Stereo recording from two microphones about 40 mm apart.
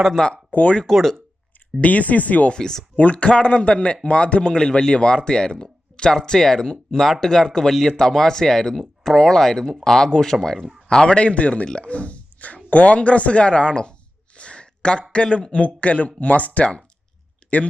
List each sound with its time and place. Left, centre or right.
0.2 s speech: centre
0.9 s speech: centre
1.8 s speech: left
2.5 s speech: centre
2.9 s speech: left
11.9 s a sound: left
12.7 s speech: left
14.3 s a sound: left
15.1 s speech: left
17.4 s clicking: left